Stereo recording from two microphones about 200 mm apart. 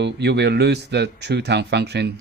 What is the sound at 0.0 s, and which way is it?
Speech, 55° right (ahead or behind).